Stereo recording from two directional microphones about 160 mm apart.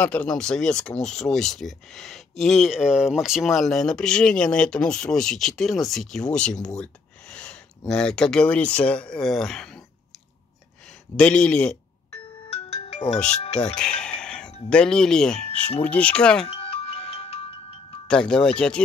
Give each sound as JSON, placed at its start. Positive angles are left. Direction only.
{"t": 0.0, "sound": "speech", "side_deg": 10}
{"t": 11.1, "sound": "speech", "side_deg": 5}
{"t": 12.1, "sound": "ringtone", "side_deg": 35}
{"t": 13.3, "sound": "speech", "side_deg": 45}
{"t": 13.9, "sound": "a sound", "side_deg": 5}
{"t": 14.7, "sound": "speech", "side_deg": 5}
{"t": 16.4, "sound": "music", "side_deg": 40}
{"t": 18.0, "sound": "speech", "side_deg": 5}